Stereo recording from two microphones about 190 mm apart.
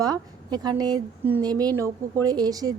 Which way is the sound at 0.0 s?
20° right (ahead or behind).